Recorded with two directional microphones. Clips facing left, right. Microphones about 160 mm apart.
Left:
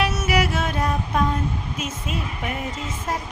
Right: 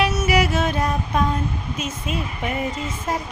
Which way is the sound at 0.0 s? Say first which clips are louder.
Right 2 dB; centre (ahead or behind).